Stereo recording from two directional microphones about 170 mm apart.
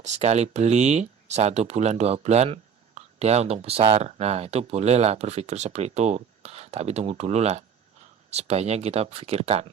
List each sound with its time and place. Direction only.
0.0 s speech: 40° right (ahead or behind)